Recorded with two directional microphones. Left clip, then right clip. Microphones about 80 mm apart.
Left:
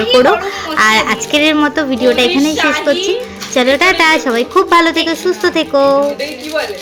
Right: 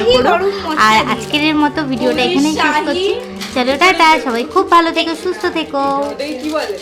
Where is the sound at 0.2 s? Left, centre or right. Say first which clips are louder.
Left 2 dB; left.